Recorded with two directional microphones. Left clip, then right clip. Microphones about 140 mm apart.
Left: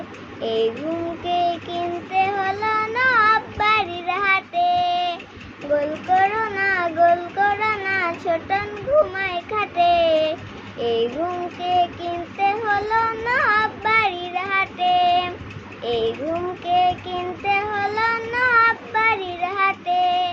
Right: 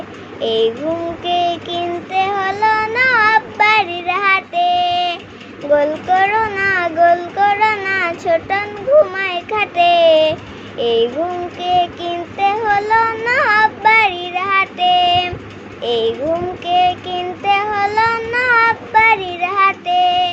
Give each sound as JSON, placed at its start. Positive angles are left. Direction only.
{"t": 0.4, "sound": "child singing", "side_deg": -45}